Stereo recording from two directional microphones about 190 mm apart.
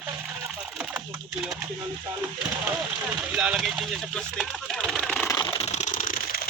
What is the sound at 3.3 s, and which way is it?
Speech, centre (ahead or behind).